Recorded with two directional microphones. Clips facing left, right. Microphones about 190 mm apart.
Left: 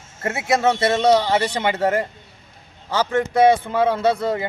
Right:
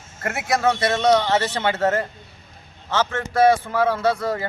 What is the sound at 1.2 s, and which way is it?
Speech, 10° left (ahead or behind).